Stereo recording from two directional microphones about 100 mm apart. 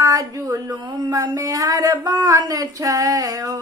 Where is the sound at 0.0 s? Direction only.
35° right (ahead or behind).